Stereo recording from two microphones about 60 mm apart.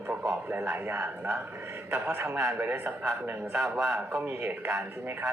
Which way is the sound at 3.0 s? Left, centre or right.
Right.